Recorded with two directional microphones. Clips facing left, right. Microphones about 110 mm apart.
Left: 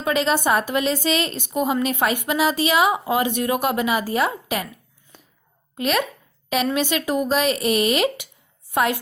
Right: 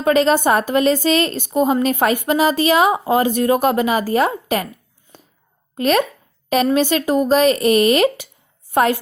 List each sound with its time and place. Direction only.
0.0 s a woman's voice: 45° right (ahead or behind)
5.7 s a woman's voice: 40° right (ahead or behind)
8.7 s chopping: 45° right (ahead or behind)